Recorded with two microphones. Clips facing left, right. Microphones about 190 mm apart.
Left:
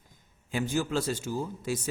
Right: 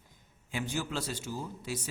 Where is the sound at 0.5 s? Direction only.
45° left (ahead or behind).